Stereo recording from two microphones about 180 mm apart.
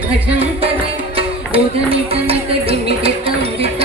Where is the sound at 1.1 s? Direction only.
30° right (ahead or behind).